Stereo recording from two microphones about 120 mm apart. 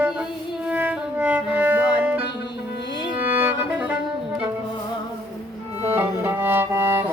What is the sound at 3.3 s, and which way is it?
Music, 15° right (ahead or behind).